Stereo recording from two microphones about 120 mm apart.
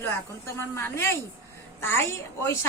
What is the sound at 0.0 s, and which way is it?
Speech, 20° left (ahead or behind).